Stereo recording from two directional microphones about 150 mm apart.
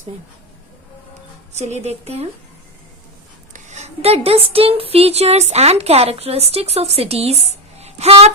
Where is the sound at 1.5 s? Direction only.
50° right (ahead or behind).